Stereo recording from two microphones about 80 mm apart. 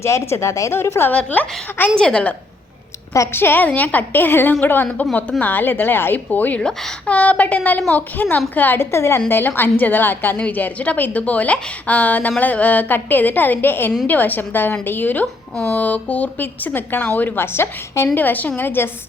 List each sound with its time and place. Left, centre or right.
0.0 s speech: left
1.1 s speech: centre
2.0 s speech: centre
3.3 s speech: left
6.6 s speech: centre
7.2 s speech: centre